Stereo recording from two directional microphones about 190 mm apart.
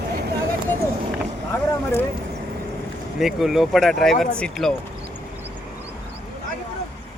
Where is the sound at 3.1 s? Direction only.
Centre (ahead or behind).